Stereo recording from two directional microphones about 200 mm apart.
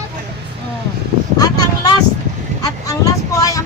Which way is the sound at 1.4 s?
20° left (ahead or behind).